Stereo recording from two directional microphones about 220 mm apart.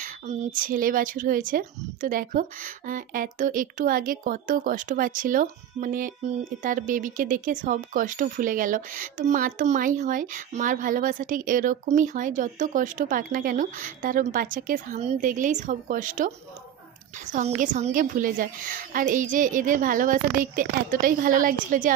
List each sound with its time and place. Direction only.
0.0 s speech: 35° right (ahead or behind)